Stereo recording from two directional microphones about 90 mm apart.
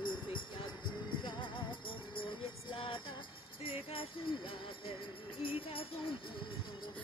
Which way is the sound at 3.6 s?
90° left.